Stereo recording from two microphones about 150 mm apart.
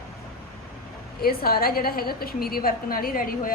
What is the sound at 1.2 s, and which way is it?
A woman's voice, 90° left.